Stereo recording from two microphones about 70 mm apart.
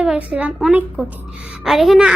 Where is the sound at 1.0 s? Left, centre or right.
Centre.